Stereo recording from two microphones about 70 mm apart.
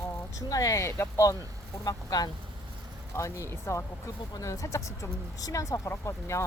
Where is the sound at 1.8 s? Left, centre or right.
Left.